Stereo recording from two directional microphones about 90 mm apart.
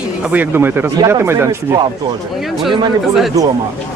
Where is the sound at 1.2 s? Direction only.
25° right (ahead or behind).